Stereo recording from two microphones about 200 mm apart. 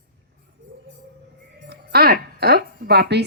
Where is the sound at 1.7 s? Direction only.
50° right (ahead or behind).